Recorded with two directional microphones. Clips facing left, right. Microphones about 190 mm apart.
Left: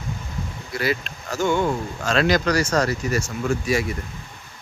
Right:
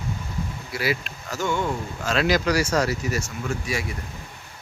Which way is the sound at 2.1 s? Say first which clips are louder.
Left 2 dB; 5° right (ahead or behind).